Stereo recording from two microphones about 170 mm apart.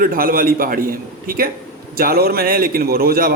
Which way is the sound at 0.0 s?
55° right (ahead or behind).